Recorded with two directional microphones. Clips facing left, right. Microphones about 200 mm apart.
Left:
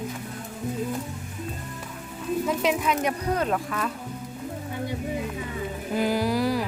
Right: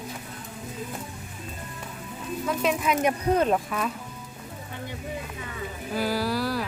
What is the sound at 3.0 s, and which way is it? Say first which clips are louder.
Speech: right 3 dB; 20° right (ahead or behind).